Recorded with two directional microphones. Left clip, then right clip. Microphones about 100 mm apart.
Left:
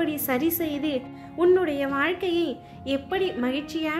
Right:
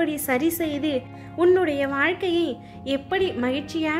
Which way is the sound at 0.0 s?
30° right (ahead or behind).